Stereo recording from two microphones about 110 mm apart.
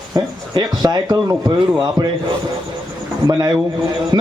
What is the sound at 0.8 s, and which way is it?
Speech, 35° right (ahead or behind).